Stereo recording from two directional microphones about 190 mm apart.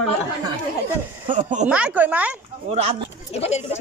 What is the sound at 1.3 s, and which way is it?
Speech, 40° right (ahead or behind).